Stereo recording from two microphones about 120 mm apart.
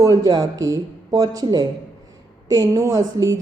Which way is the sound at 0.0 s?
30° right (ahead or behind).